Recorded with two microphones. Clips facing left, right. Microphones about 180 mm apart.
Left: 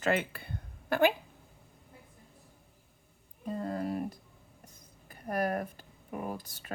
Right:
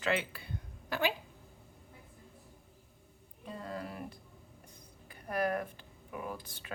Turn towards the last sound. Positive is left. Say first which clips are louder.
# left 3 dB
turn(degrees=45)  # may be behind; listen again after turning